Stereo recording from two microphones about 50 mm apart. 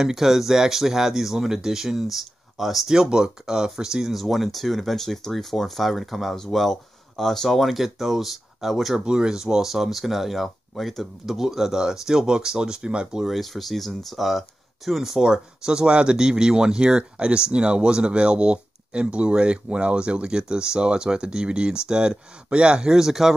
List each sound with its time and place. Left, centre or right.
0.0 s speech: centre
13.2 s speech: centre